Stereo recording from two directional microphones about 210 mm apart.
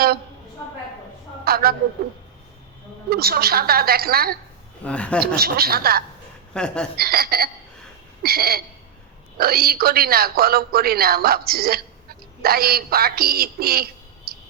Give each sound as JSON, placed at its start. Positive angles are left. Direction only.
{"t": 1.5, "sound": "a sound", "side_deg": -45}
{"t": 3.1, "sound": "a woman's voice", "side_deg": -45}
{"t": 4.8, "sound": "speech", "side_deg": 5}
{"t": 5.4, "sound": "a woman's voice", "side_deg": -45}
{"t": 6.5, "sound": "speech", "side_deg": 5}
{"t": 6.9, "sound": "a woman's voice", "side_deg": -45}
{"t": 14.3, "sound": "a sound", "side_deg": -45}